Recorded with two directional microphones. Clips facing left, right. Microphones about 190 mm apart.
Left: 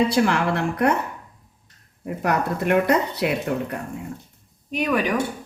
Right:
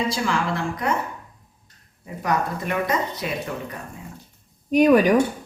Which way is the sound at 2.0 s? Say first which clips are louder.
Left 2 dB; 65° left (ahead or behind).